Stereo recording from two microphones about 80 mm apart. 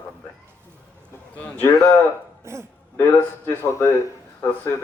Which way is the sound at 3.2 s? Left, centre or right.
Left.